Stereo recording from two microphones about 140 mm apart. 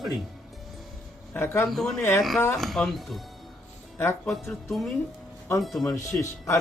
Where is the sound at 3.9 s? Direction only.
15° left (ahead or behind).